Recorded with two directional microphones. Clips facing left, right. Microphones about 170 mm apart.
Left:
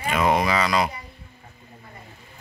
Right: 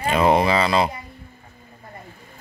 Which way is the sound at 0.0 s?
30° right (ahead or behind).